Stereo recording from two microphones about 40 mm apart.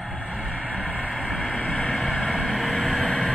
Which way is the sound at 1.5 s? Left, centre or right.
Left.